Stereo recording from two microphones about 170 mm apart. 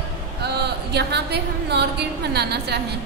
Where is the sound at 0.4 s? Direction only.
75° right (ahead or behind).